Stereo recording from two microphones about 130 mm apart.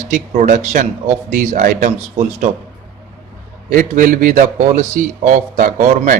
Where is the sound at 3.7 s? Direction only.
90° right.